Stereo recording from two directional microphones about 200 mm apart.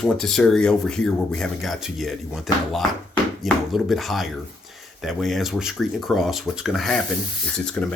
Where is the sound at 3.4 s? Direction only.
Centre (ahead or behind).